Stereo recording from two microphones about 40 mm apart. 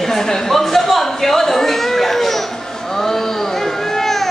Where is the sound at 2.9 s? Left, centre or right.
Centre.